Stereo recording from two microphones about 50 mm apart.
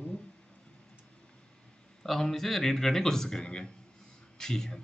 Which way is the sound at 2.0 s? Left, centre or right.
Centre.